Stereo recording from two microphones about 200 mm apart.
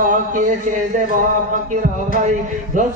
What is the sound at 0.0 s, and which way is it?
Speech, 40° right (ahead or behind).